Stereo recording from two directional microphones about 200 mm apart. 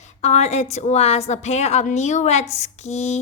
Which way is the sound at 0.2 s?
35° left (ahead or behind).